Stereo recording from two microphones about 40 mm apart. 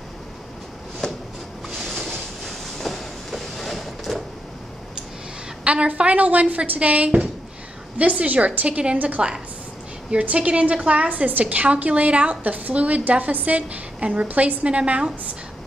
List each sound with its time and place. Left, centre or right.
1.0 s shuffling cards: centre
1.8 s train: centre
5.6 s a woman's voice: right
11.1 s a woman's voice: right
13.6 s a woman's voice: right